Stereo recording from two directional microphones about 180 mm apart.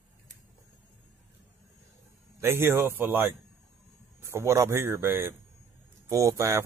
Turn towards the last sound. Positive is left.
turn(degrees=-15)  # may be behind; listen again after turning